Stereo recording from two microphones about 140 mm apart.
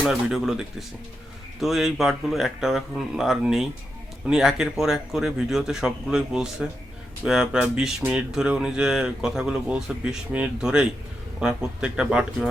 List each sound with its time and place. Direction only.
0.0 s speech: 5° right (ahead or behind)